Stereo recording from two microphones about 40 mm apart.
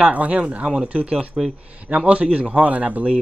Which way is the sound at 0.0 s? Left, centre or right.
Right.